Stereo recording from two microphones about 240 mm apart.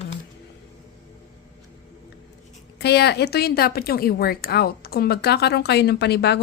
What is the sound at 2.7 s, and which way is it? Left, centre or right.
A woman's voice, left.